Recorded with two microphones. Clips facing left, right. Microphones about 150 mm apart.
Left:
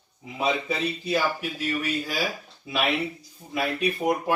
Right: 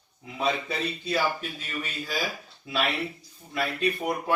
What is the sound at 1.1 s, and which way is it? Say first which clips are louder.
Speech: left 1 dB; 10° left (ahead or behind).